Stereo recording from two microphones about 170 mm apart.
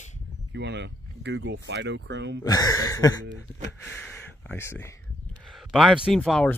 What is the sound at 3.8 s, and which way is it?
Speech, 5° left (ahead or behind).